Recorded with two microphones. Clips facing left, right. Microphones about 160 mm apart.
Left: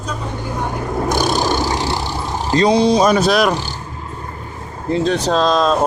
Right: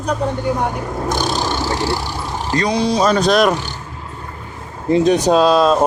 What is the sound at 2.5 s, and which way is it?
Speech, 25° left (ahead or behind).